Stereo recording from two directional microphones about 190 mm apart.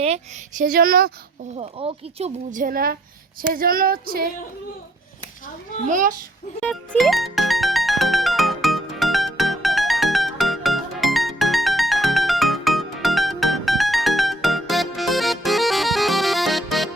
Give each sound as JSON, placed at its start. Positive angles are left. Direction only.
{"t": 0.6, "sound": "speech", "side_deg": -50}
{"t": 1.5, "sound": "speech", "side_deg": -30}
{"t": 5.8, "sound": "speech", "side_deg": -45}
{"t": 6.6, "sound": "music", "side_deg": 5}